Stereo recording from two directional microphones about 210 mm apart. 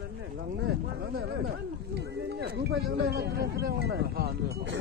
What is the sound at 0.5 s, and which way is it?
Speech, 55° right (ahead or behind).